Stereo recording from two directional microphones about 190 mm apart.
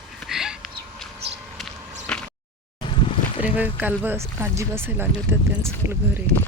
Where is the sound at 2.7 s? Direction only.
30° left (ahead or behind).